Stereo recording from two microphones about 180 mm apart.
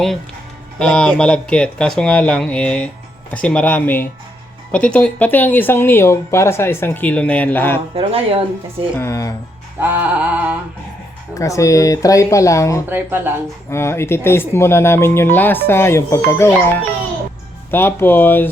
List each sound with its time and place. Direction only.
0.8 s speech: 5° left (ahead or behind)
7.9 s speech: 30° right (ahead or behind)
9.0 s speech: 15° left (ahead or behind)
9.8 s music: 10° right (ahead or behind)
11.3 s speech: 15° left (ahead or behind)
12.9 s music: 10° right (ahead or behind)
13.7 s speech: 15° left (ahead or behind)